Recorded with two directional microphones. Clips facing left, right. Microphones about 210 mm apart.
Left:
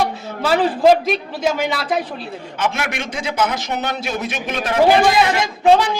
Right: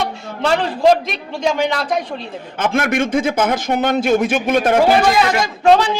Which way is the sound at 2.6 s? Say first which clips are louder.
Right 6 dB; 50° right (ahead or behind).